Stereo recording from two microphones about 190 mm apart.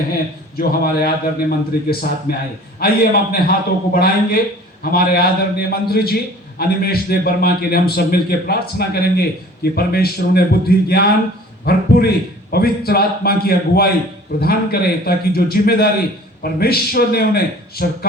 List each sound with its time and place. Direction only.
0.6 s a man's voice: 55° left (ahead or behind)